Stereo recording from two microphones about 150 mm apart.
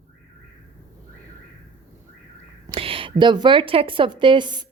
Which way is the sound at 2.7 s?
35° right (ahead or behind).